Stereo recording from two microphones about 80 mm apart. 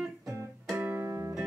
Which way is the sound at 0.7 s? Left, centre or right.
Right.